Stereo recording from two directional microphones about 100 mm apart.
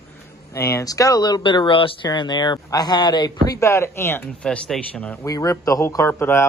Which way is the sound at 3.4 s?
30° left (ahead or behind).